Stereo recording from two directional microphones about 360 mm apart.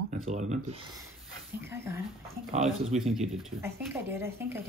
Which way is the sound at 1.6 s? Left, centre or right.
Centre.